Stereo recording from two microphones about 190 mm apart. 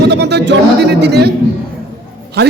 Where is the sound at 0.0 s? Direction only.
60° right (ahead or behind).